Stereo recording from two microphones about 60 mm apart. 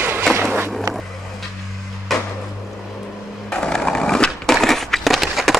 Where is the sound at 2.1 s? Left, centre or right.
Centre.